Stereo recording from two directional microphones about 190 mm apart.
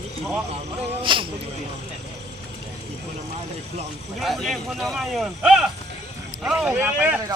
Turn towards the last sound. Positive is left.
turn(degrees=-10)  # may be behind; listen again after turning